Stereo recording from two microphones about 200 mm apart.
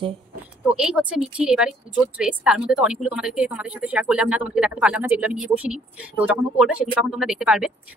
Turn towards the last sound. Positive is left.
turn(degrees=-5)  # may be behind; listen again after turning